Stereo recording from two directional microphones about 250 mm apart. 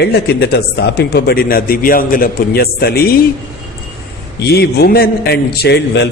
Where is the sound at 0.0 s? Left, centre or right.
Left.